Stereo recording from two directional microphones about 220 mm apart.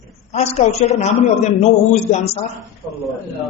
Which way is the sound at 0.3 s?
30° left (ahead or behind).